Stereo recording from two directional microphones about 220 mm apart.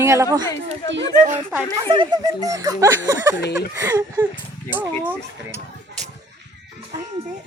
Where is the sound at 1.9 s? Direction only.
20° right (ahead or behind).